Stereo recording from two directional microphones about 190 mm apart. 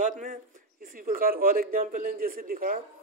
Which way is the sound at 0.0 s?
40° right (ahead or behind).